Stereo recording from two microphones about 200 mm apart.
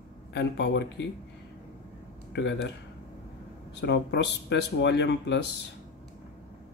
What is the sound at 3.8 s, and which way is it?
Speech, 60° left (ahead or behind).